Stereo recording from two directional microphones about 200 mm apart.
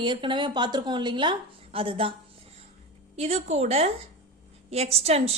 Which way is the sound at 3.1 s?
30° right (ahead or behind).